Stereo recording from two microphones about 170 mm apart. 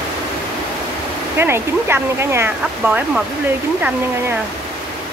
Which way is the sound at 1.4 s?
15° right (ahead or behind).